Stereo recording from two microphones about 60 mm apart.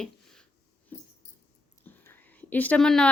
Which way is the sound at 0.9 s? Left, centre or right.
Left.